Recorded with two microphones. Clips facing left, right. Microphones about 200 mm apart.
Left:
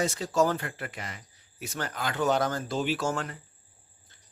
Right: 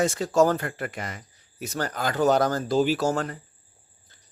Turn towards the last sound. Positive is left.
turn(degrees=-40)  # may be behind; listen again after turning